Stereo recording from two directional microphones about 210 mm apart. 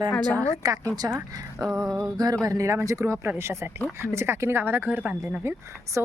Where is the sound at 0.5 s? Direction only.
15° right (ahead or behind).